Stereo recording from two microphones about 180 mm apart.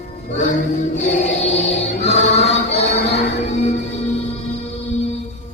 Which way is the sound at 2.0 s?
35° left (ahead or behind).